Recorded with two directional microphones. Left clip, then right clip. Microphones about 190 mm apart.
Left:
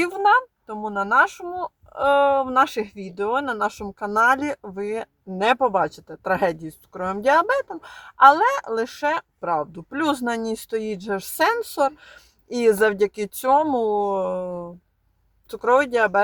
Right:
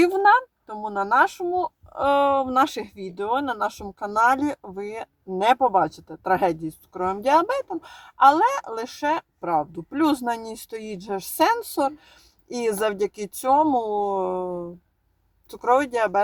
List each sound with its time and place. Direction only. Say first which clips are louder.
0.0 s speech: right 1 dB; 15° left (ahead or behind)